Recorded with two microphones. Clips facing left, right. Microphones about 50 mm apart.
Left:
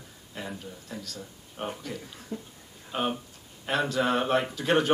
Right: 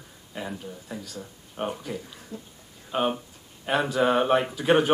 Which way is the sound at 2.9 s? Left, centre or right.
Centre.